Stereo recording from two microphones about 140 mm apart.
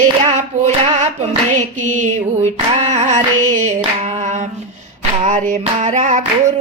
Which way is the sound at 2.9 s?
55° right (ahead or behind).